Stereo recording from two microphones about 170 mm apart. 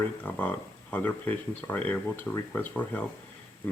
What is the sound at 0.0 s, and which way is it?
Speech, 10° left (ahead or behind).